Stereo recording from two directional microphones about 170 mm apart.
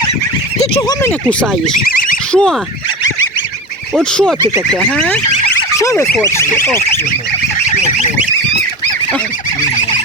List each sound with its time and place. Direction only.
0.8 s speech: 25° left (ahead or behind)
1.3 s speech: 5° left (ahead or behind)
1.7 s speech: 60° left (ahead or behind)
2.3 s speech: 5° left (ahead or behind)
3.9 s speech: centre (ahead or behind)